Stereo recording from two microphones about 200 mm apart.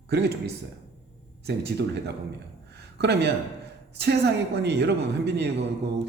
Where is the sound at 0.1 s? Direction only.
55° right (ahead or behind).